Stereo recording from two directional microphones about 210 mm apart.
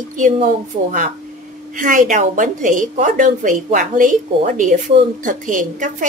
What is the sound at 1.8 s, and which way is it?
A woman's voice, 40° right (ahead or behind).